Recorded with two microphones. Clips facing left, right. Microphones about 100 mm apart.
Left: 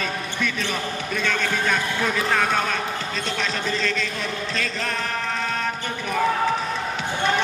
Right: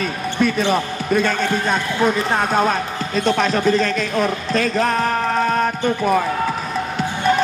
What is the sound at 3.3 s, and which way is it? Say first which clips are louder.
A man's voice: right 12 dB; 45° right (ahead or behind).